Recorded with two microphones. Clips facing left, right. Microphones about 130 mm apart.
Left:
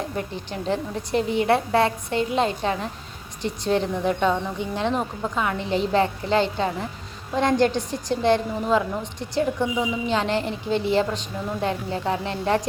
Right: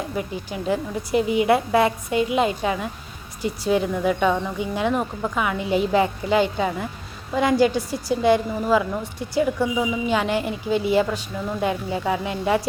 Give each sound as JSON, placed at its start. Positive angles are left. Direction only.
{"t": 0.2, "sound": "a woman's voice", "side_deg": -10}